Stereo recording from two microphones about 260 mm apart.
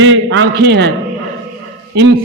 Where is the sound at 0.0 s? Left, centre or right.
Right.